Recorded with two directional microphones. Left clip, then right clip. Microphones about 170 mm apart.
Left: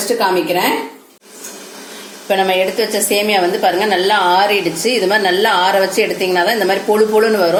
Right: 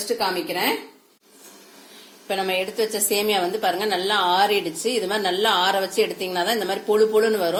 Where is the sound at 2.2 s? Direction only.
45° right (ahead or behind).